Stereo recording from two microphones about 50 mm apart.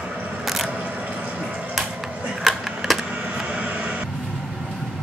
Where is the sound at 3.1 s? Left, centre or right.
Centre.